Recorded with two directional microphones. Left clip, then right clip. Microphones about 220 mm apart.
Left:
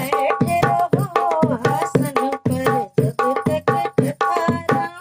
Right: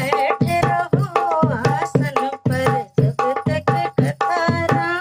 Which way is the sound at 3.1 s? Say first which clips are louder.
Even; 35° left (ahead or behind).